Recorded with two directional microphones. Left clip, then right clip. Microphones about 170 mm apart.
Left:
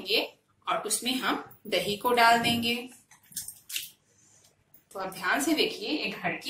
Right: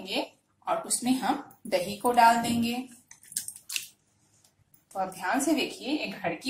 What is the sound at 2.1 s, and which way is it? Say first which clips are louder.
Speech: right 1 dB; 50° right (ahead or behind).